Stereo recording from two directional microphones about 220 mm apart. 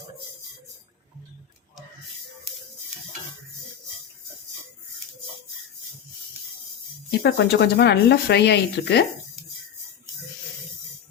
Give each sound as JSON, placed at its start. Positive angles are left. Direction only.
{"t": 7.2, "sound": "speech", "side_deg": 50}